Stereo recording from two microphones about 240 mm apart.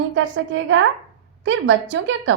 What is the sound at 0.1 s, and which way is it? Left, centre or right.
A woman's voice, right.